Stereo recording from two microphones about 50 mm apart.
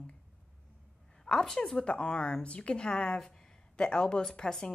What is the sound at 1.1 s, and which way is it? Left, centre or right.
Speech, centre.